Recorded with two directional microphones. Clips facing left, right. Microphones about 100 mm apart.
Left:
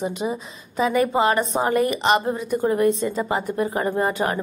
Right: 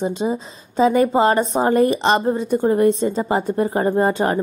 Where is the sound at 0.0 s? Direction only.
30° right (ahead or behind).